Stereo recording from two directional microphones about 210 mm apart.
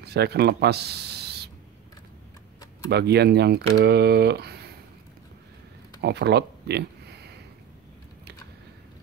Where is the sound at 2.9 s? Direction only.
50° right (ahead or behind).